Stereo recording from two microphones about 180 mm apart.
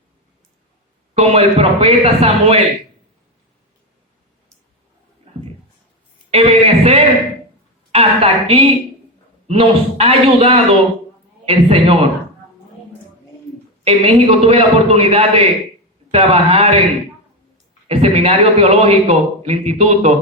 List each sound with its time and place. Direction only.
1.1 s a man's voice: 35° right (ahead or behind)
6.3 s a man's voice: 35° right (ahead or behind)
13.8 s a man's voice: 35° right (ahead or behind)
17.8 s a man's voice: 35° right (ahead or behind)